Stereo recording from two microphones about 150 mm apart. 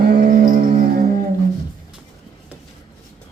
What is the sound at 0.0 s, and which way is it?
Music, 90° right.